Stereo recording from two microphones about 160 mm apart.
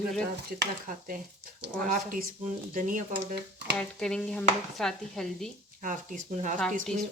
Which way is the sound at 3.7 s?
5° left (ahead or behind).